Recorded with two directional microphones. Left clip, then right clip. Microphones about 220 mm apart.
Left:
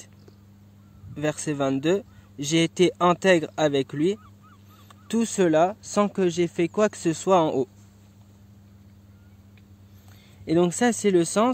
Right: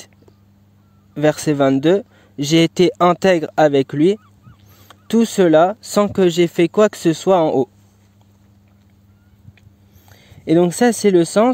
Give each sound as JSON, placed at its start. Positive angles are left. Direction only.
{"t": 1.1, "sound": "speech", "side_deg": -45}
{"t": 10.1, "sound": "speech", "side_deg": -40}